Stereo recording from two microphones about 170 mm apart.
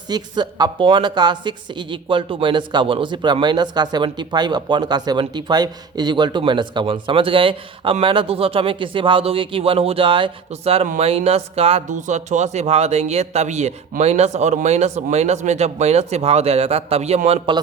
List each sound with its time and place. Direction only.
0.1 s speech: 25° right (ahead or behind)